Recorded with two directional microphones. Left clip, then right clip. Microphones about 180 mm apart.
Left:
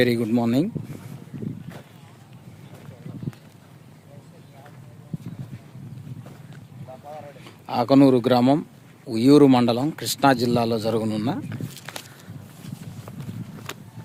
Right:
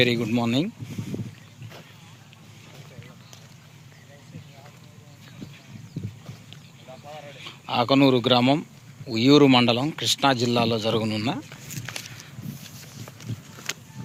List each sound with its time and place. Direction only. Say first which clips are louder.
0.0 s speech: left 1 dB; 30° left (ahead or behind)
7.4 s speech: even; 25° left (ahead or behind)
11.4 s walk: left 1 dB; 5° left (ahead or behind)